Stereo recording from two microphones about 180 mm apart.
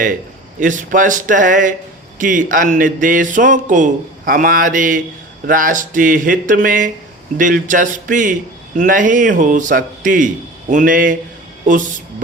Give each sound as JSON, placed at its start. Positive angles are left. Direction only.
{"t": 0.6, "sound": "a man's voice", "side_deg": -45}